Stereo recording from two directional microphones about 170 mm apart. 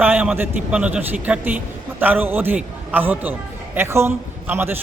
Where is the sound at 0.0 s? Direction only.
10° right (ahead or behind).